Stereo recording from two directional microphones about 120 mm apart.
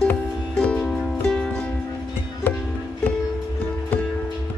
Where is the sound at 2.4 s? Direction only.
15° left (ahead or behind).